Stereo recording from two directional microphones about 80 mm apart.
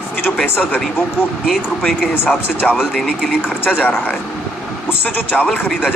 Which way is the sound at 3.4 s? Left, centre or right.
Left.